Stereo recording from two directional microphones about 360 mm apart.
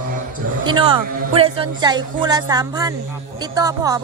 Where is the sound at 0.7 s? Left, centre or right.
Centre.